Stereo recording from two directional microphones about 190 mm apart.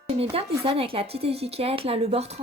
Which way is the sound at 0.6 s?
30° right (ahead or behind).